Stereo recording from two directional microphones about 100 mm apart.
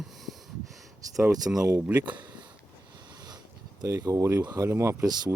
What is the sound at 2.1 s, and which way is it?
Speech, 45° right (ahead or behind).